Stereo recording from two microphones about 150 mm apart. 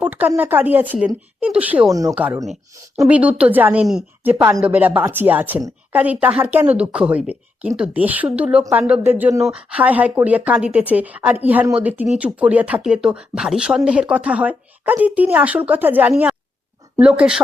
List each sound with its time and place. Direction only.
0.0 s speech: 10° right (ahead or behind)
1.9 s speech: 20° right (ahead or behind)
2.1 s speech: 10° right (ahead or behind)